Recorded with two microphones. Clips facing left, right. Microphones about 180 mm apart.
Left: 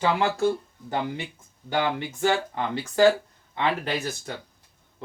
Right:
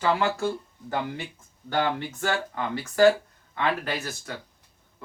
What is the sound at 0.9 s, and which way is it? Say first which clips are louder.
A man's voice: left 1 dB; 20° left (ahead or behind).